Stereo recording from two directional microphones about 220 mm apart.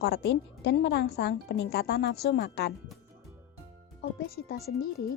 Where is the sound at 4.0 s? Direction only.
45° left (ahead or behind).